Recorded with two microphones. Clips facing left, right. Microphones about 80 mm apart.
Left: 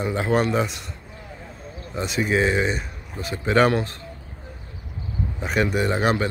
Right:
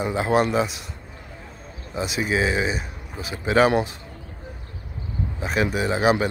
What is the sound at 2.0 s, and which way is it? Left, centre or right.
Speech, centre.